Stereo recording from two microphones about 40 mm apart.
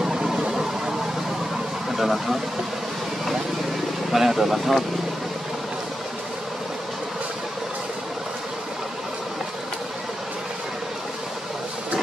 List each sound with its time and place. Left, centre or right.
0.0 s a sound: centre
1.9 s speech: centre
4.1 s speech: centre